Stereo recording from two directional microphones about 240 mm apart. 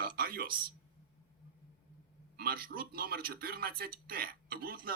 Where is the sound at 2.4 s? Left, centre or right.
Right.